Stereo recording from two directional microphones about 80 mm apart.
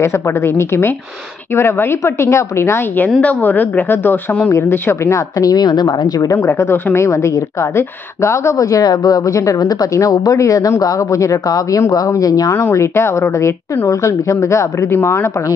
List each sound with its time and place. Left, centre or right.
0.0 s a woman's voice: left
3.1 s a woman's voice: centre; by 5.2 s left
5.4 s speech: left
6.3 s a woman's voice: left
12.6 s a woman's voice: left